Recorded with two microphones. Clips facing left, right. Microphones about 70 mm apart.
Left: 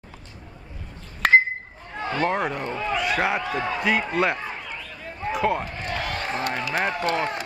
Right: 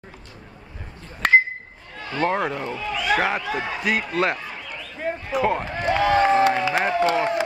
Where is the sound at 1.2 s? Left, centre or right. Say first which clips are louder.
Even; centre.